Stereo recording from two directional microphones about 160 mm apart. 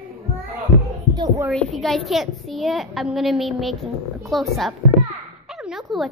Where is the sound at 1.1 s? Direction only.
25° right (ahead or behind).